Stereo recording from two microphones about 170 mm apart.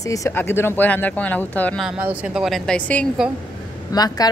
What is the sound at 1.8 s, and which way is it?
A woman's voice, 10° right (ahead or behind).